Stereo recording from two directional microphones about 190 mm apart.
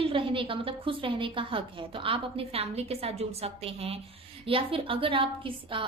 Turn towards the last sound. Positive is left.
turn(degrees=-25)  # may be behind; listen again after turning